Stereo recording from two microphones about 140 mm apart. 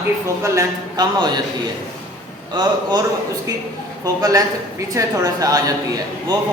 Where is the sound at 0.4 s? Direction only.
20° right (ahead or behind).